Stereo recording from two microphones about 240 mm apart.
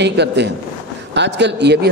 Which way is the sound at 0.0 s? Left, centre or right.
Right.